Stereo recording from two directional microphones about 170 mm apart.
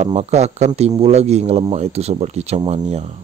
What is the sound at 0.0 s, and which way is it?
Speech, 40° right (ahead or behind).